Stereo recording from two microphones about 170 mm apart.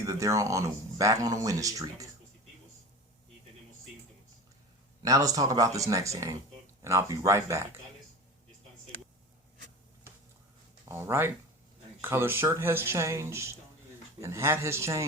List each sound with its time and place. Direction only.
0.0 s speech: 20° right (ahead or behind)
5.0 s speech: 20° right (ahead or behind)
10.8 s speech: 15° right (ahead or behind)